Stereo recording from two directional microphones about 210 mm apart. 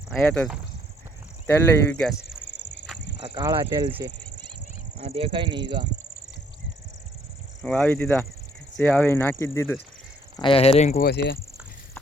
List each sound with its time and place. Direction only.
0.3 s speech: centre (ahead or behind)
1.5 s speech: 10° left (ahead or behind)
2.3 s cricket: 60° left (ahead or behind)
3.2 s speech: 20° right (ahead or behind)
7.6 s speech: 5° left (ahead or behind)
10.3 s speech: 25° left (ahead or behind)
11.0 s speech: 55° left (ahead or behind)